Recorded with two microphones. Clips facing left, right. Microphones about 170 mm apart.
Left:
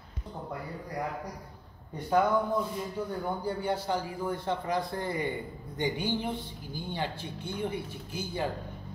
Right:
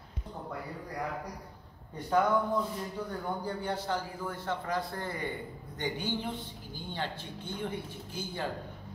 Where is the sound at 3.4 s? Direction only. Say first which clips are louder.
Left 3 dB; 10° left (ahead or behind).